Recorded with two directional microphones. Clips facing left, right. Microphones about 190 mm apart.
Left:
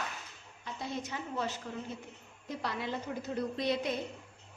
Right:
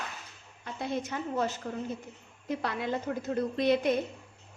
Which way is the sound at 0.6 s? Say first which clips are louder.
Right 5 dB; 55° right (ahead or behind).